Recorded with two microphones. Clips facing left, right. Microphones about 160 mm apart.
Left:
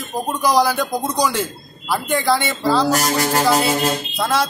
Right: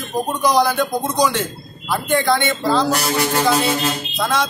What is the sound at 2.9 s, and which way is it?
Music, 45° left (ahead or behind).